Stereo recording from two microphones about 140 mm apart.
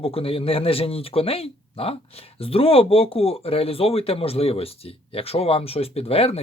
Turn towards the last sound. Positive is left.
turn(degrees=45)  # may be behind; listen again after turning